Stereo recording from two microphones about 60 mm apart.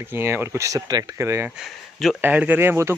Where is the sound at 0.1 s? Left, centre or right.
Right.